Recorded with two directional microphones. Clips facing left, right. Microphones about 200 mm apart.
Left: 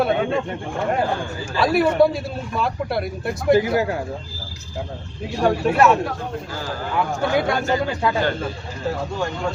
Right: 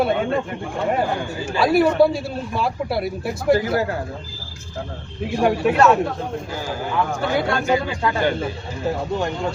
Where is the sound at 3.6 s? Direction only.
15° left (ahead or behind).